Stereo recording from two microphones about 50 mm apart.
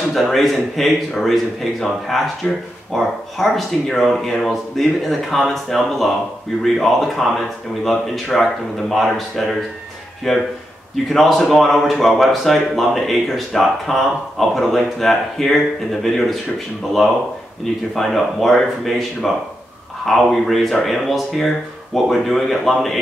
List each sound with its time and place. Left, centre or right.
0.1 s speech: centre
2.4 s speech: left
2.9 s speech: centre